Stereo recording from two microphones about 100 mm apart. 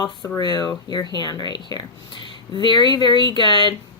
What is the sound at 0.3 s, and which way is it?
Speech, 40° left (ahead or behind).